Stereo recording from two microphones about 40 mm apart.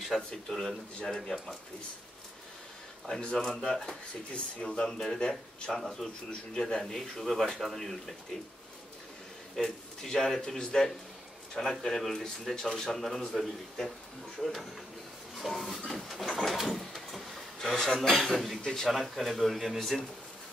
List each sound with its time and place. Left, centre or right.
0.3 s a man's voice: centre
3.2 s a man's voice: centre
9.6 s a man's voice: centre
15.7 s speech: centre
16.5 s sliding door: centre
17.6 s a man's voice: centre
18.3 s speech: centre